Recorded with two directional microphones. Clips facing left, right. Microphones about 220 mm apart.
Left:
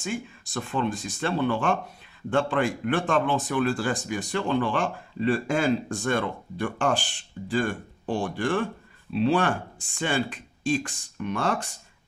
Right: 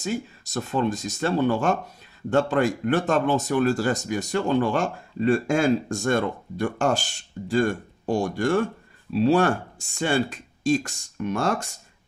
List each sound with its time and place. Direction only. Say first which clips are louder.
0.0 s speech: right 3 dB; 40° right (ahead or behind)